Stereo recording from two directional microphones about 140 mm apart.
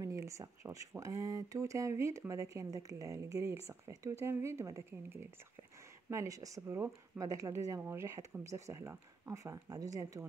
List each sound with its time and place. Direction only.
0.0 s speech: 20° right (ahead or behind)